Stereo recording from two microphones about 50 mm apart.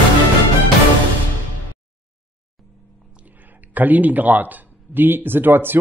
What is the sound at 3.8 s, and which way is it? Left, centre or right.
Speech, right.